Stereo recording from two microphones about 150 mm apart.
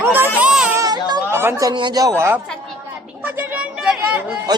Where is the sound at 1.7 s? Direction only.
30° right (ahead or behind).